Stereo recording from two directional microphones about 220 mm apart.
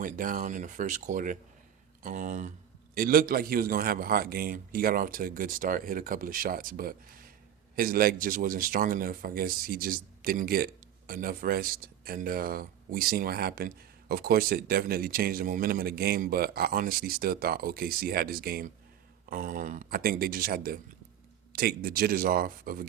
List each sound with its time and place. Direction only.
0.0 s a man's voice: 40° right (ahead or behind)